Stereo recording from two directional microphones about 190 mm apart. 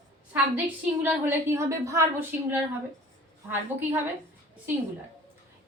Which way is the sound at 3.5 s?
10° right (ahead or behind).